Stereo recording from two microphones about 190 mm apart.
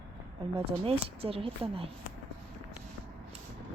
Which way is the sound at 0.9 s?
30° right (ahead or behind).